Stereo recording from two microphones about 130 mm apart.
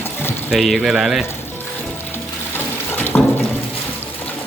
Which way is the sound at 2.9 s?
15° left (ahead or behind).